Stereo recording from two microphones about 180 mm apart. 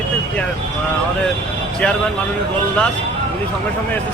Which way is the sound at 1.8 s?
5° left (ahead or behind).